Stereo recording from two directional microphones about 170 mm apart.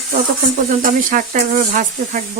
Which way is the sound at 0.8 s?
50° right (ahead or behind).